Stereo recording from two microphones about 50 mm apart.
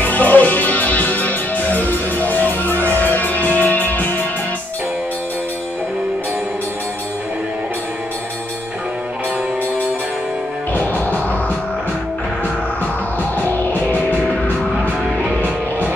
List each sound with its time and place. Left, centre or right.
0.0 s music: left
10.7 s music: left
13.4 s music: left
14.2 s music: centre
15.3 s music: left